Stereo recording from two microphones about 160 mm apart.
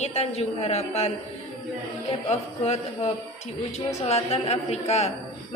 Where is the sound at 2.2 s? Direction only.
40° left (ahead or behind).